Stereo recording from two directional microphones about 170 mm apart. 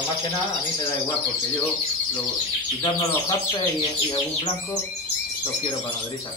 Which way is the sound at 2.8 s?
25° left (ahead or behind).